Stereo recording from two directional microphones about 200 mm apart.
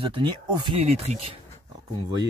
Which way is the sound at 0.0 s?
25° right (ahead or behind).